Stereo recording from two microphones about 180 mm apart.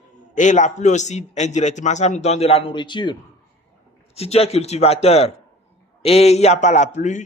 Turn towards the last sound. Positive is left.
turn(degrees=40)  # may be behind; listen again after turning